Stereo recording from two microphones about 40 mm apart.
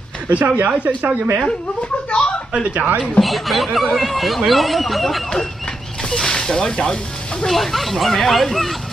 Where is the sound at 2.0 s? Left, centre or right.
Left.